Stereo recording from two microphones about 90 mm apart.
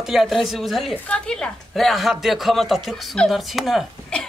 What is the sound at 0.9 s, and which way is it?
Speech, 10° left (ahead or behind).